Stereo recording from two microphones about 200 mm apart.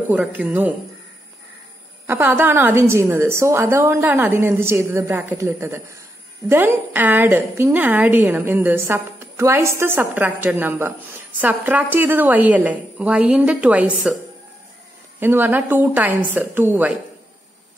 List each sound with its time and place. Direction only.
0.1 s a woman's voice: 10° right (ahead or behind)
2.0 s a woman's voice: 10° right (ahead or behind)
15.1 s a woman's voice: 10° right (ahead or behind)